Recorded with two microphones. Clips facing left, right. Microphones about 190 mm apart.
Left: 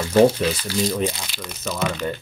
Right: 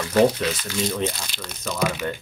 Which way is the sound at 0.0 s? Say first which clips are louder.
Left 3 dB; 30° left (ahead or behind).